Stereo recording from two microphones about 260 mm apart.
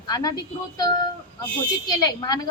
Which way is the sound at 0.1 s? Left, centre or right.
Centre.